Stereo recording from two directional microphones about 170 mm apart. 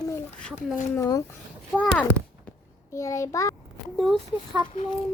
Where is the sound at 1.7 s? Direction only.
5° left (ahead or behind).